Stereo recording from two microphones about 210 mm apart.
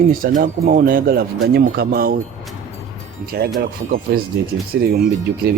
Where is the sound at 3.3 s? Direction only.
45° right (ahead or behind).